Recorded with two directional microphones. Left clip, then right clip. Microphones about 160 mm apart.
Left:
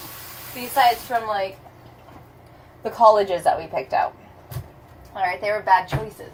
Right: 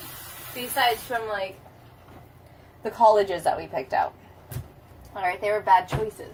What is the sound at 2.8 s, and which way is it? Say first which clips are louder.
Speech: left 3 dB; 15° right (ahead or behind).